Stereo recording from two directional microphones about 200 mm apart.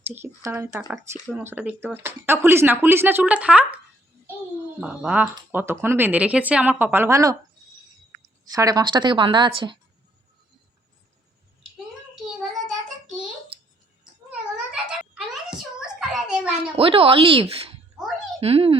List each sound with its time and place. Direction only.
0.1 s speech: 10° right (ahead or behind)
4.8 s speech: 5° right (ahead or behind)
8.4 s a woman's voice: 20° right (ahead or behind)
12.1 s child singing: centre (ahead or behind)
14.0 s a sound: 5° right (ahead or behind)
16.7 s a woman's voice: 25° right (ahead or behind)